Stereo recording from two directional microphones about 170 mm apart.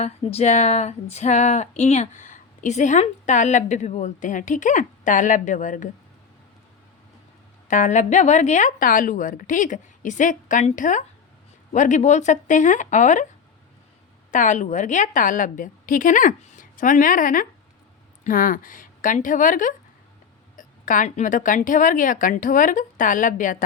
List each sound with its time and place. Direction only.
0.0 s speech: 40° left (ahead or behind)
7.7 s speech: 45° left (ahead or behind)
14.3 s speech: 45° left (ahead or behind)